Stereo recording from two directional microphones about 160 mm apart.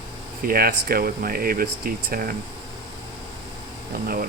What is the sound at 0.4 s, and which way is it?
Speech, 70° right (ahead or behind).